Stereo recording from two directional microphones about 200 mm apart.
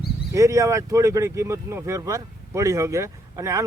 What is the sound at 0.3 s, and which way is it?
Speech, 15° right (ahead or behind).